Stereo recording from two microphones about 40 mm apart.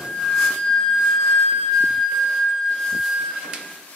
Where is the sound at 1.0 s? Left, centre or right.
Centre.